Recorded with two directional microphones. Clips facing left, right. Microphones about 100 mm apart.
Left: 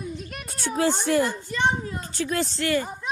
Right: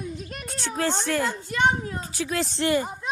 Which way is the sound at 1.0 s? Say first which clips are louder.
Left 3 dB; 15° left (ahead or behind).